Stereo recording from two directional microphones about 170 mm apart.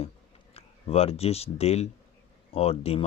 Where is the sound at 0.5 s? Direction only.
35° left (ahead or behind).